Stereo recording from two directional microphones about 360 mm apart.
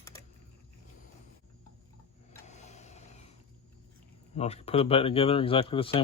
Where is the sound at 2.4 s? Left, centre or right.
Centre.